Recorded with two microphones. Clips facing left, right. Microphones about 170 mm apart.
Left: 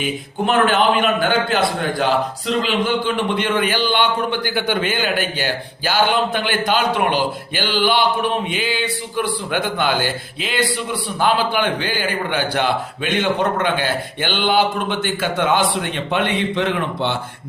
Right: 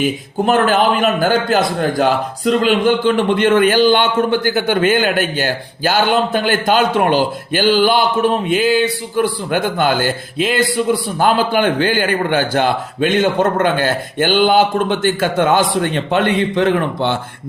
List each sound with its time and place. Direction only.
0.0 s a man's voice: 40° right (ahead or behind)